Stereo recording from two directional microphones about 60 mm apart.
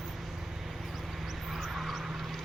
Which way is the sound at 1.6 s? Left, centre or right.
Centre.